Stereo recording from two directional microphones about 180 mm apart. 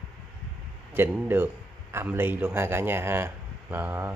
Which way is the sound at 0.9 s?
10° right (ahead or behind).